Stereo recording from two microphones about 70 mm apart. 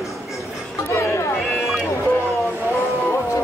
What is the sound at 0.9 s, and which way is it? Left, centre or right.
Music, left.